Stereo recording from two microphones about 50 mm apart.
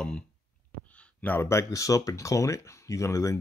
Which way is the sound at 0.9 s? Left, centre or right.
Left.